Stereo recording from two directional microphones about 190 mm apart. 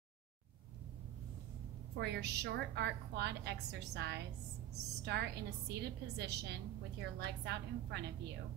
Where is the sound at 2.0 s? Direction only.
60° right (ahead or behind).